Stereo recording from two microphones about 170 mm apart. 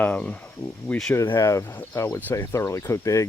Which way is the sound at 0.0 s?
10° left (ahead or behind).